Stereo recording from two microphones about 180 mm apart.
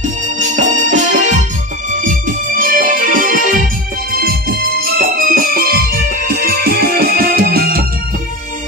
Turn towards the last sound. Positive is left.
turn(degrees=-55)  # may be behind; listen again after turning